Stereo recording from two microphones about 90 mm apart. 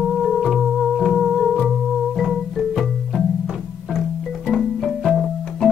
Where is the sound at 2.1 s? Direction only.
Centre (ahead or behind).